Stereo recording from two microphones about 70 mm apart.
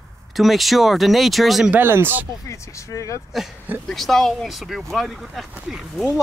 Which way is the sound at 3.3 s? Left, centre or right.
Centre.